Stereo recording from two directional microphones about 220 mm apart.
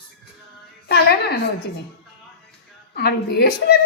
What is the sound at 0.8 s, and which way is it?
Speech, 45° left (ahead or behind).